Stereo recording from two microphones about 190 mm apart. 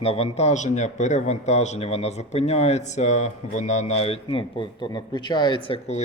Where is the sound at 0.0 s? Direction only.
30° left (ahead or behind).